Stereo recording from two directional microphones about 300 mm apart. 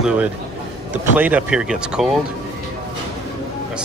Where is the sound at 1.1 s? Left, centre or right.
Centre.